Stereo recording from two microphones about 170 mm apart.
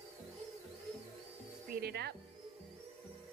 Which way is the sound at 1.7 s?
70° right (ahead or behind).